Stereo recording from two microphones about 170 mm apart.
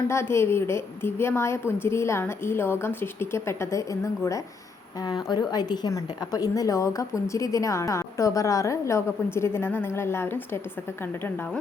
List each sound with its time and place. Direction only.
0.1 s a woman's voice: 15° left (ahead or behind)